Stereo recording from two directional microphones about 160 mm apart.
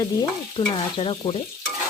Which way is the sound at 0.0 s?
30° left (ahead or behind).